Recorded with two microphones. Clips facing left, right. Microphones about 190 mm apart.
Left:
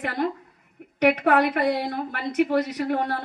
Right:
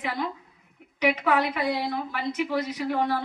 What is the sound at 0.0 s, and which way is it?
A woman's voice, 55° left (ahead or behind).